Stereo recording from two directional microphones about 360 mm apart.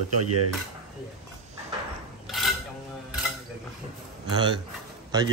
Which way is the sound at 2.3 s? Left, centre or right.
Centre.